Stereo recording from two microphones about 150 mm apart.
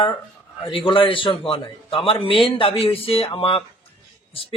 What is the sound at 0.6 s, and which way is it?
A man's voice, 35° left (ahead or behind).